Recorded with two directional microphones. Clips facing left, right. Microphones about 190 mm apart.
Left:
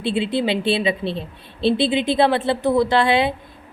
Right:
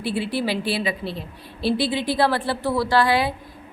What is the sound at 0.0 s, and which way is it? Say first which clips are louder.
A woman's voice: left 4 dB; 20° left (ahead or behind).